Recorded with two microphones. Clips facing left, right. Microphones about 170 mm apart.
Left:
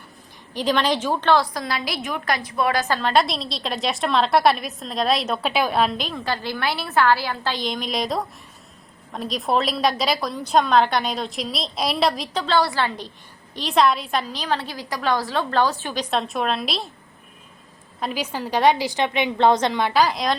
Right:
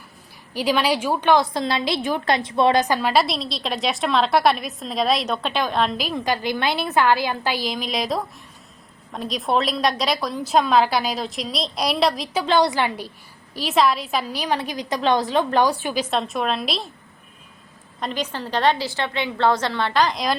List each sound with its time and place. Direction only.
0.5 s a woman's voice: 10° right (ahead or behind)
1.5 s a woman's voice: 25° right (ahead or behind); by 6.1 s 5° left (ahead or behind)
6.1 s a woman's voice: 15° right (ahead or behind)
13.6 s a woman's voice: 5° right (ahead or behind)
16.0 s a woman's voice: centre (ahead or behind)
18.0 s a woman's voice: 10° left (ahead or behind)